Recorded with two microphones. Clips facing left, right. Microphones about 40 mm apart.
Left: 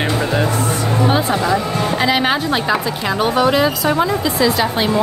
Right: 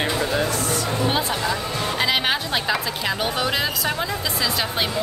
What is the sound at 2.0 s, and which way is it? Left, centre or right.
Speech, centre.